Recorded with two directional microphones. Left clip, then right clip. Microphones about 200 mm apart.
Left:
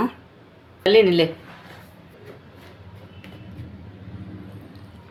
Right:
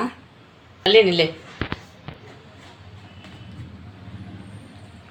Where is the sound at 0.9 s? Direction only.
45° left (ahead or behind).